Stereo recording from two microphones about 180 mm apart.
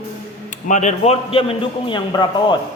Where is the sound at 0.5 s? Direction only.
40° left (ahead or behind).